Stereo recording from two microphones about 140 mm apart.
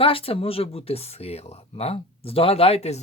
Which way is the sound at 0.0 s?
40° left (ahead or behind).